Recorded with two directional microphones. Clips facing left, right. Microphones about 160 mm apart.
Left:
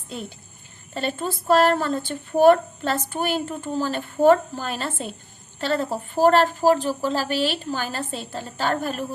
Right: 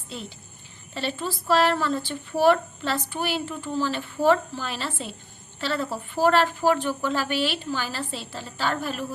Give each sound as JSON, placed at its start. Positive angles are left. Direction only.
{"t": 0.1, "sound": "speech", "side_deg": 50}